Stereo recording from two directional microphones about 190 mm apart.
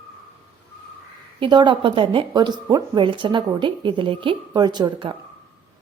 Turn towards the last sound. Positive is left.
turn(degrees=-25)  # may be behind; listen again after turning